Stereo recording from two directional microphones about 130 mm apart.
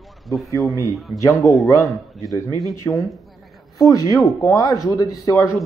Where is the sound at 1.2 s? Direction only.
20° left (ahead or behind).